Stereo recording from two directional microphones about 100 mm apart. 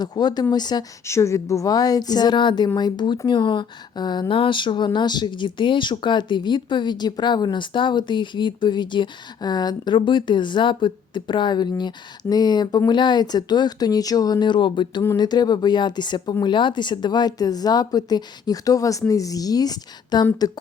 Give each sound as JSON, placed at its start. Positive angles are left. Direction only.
{"t": 0.0, "sound": "speech", "side_deg": 45}
{"t": 1.0, "sound": "speech", "side_deg": 30}